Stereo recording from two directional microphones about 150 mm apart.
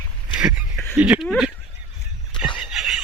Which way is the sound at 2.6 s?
5° right (ahead or behind).